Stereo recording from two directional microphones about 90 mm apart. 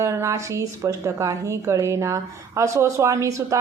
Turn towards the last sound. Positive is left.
turn(degrees=-35)  # may be behind; listen again after turning